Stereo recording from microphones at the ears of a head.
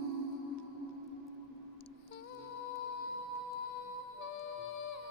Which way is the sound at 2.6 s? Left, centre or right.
Left.